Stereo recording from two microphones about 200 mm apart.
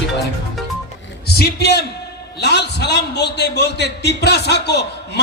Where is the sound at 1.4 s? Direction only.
55° left (ahead or behind).